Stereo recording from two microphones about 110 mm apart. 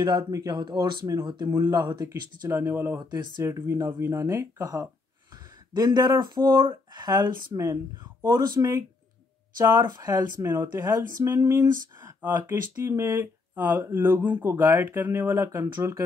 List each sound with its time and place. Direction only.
0.0 s speech: 40° right (ahead or behind)
7.1 s speech: 25° right (ahead or behind)